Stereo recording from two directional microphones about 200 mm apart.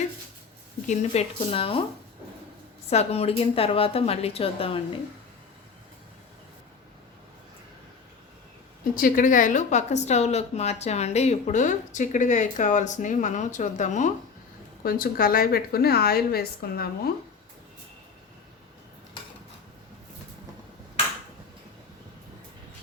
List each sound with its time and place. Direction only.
0.9 s a woman's voice: 30° left (ahead or behind)
2.9 s a woman's voice: 30° left (ahead or behind)
9.0 s a woman's voice: 45° left (ahead or behind)